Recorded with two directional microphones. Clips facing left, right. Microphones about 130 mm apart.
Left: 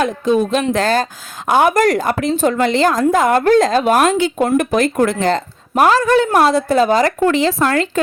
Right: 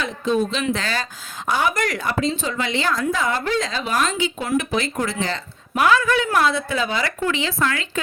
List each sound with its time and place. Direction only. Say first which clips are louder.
0.0 s a woman's voice: left 6 dB; 50° left (ahead or behind)